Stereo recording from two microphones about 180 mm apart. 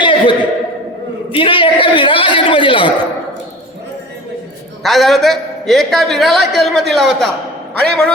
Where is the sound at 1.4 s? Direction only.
30° left (ahead or behind).